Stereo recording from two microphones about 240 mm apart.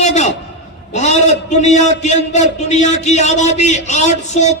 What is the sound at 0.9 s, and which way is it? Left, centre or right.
A man's voice, left.